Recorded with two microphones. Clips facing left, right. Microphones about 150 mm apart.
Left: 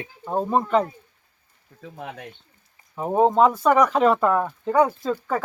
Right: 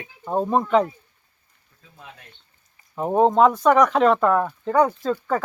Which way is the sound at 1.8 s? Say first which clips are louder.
Left 10 dB; 70° left (ahead or behind).